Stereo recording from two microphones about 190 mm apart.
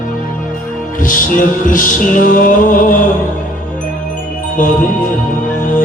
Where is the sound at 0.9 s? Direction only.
45° left (ahead or behind).